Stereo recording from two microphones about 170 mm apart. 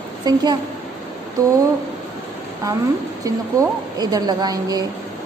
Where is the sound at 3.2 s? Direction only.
20° right (ahead or behind).